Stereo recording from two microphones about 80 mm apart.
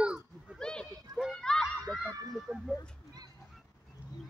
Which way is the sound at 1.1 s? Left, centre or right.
Centre.